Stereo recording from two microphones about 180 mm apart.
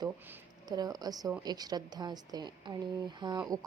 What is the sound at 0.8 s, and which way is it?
A woman's voice, 20° right (ahead or behind).